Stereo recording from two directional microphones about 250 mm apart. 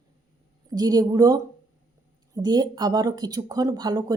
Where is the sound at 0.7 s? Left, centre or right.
Centre.